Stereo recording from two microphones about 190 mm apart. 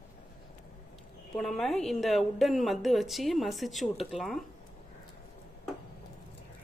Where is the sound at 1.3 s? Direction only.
Centre (ahead or behind).